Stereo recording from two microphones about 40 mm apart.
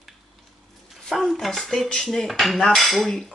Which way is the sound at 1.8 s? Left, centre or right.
Centre.